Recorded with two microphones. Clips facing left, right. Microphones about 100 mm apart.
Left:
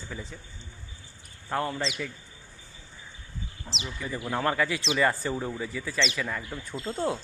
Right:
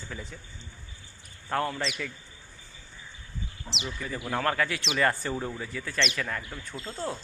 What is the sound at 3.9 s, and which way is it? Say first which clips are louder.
Speech: left 1 dB; 10° left (ahead or behind).